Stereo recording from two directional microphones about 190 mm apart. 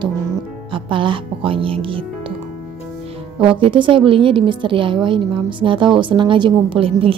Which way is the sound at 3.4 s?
30° right (ahead or behind).